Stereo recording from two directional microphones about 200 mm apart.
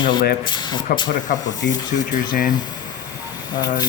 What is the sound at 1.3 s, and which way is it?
Speech, 45° left (ahead or behind).